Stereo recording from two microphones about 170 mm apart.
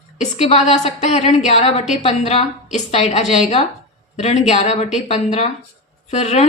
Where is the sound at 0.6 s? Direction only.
40° left (ahead or behind).